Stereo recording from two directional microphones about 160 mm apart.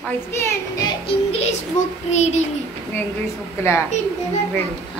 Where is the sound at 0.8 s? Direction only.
35° left (ahead or behind).